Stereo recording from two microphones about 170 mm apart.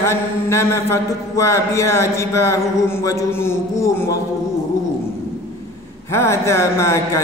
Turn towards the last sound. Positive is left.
turn(degrees=15)  # may be behind; listen again after turning